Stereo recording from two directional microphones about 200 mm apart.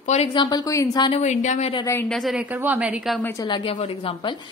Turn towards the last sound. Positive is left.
turn(degrees=25)  # may be behind; listen again after turning